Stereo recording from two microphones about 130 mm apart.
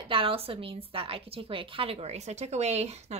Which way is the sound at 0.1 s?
45° right (ahead or behind).